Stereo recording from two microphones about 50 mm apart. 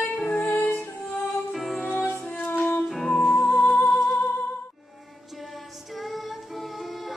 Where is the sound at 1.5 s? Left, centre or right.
Centre.